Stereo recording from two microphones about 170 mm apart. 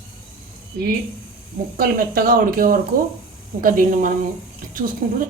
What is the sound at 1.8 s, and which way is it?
A woman's voice, 60° right (ahead or behind).